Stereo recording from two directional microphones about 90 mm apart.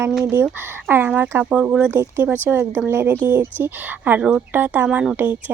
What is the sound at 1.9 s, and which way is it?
A woman's voice, 25° right (ahead or behind).